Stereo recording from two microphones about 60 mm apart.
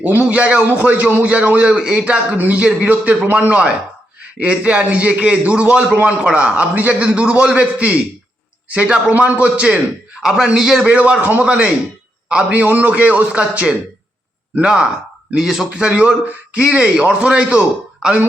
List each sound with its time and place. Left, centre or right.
0.0 s a man's voice: right
4.4 s a man's voice: right
10.2 s a man's voice: centre